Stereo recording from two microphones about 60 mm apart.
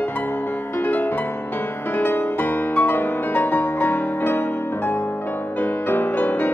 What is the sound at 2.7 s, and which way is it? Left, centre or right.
Music, left.